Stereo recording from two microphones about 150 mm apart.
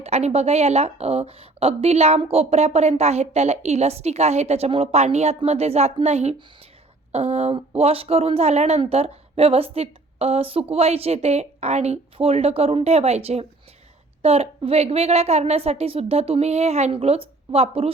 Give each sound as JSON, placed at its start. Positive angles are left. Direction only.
{"t": 0.0, "sound": "a woman's voice", "side_deg": -45}